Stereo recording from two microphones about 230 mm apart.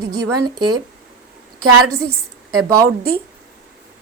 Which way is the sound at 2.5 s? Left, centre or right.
Centre.